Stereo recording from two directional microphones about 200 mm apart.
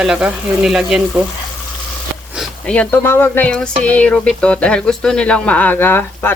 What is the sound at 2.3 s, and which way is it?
Speech, 5° left (ahead or behind).